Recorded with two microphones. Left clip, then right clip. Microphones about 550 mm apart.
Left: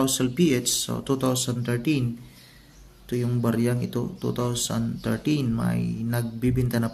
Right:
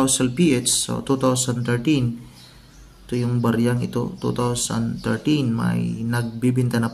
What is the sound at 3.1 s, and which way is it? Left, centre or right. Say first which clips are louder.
Speech: right 4 dB; left.